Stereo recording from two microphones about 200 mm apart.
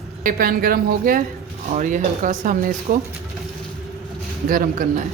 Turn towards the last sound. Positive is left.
turn(degrees=-45)  # may be behind; listen again after turning